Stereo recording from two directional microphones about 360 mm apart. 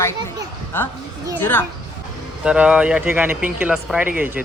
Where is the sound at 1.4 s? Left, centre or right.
Centre.